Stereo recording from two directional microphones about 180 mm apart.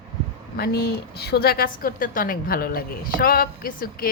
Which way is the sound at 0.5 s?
60° left (ahead or behind).